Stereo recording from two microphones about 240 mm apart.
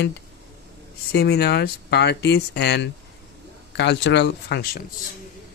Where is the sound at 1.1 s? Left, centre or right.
Left.